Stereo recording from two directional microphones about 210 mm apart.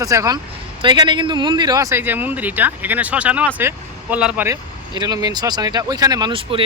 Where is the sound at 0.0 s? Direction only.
15° right (ahead or behind).